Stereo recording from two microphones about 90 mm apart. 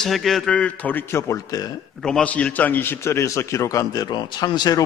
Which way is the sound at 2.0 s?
10° left (ahead or behind).